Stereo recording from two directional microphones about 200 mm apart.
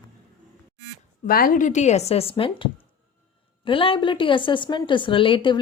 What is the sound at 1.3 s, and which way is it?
A woman's voice, 45° left (ahead or behind).